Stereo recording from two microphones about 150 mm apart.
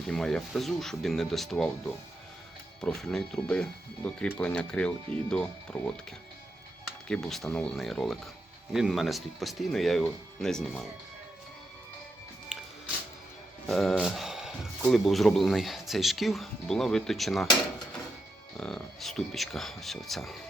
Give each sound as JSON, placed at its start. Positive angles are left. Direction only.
{"t": 0.1, "sound": "speech", "side_deg": 5}
{"t": 2.8, "sound": "speech", "side_deg": 5}
{"t": 7.1, "sound": "speech", "side_deg": 5}
{"t": 12.5, "sound": "music", "side_deg": -5}
{"t": 13.7, "sound": "a sound", "side_deg": 0}
{"t": 14.8, "sound": "speech", "side_deg": 0}
{"t": 18.5, "sound": "speech", "side_deg": 5}